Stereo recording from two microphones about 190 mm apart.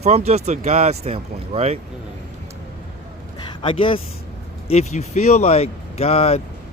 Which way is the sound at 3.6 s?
25° left (ahead or behind).